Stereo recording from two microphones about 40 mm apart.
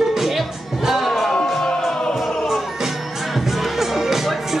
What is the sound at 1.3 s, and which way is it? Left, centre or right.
Music, centre.